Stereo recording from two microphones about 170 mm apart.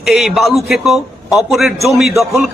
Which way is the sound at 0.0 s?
Centre (ahead or behind).